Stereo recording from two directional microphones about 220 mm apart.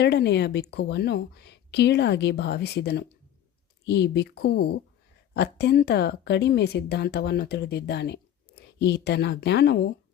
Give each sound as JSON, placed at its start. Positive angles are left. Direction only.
{"t": 0.0, "sound": "speech", "side_deg": 50}